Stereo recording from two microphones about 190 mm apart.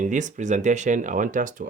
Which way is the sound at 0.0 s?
40° right (ahead or behind).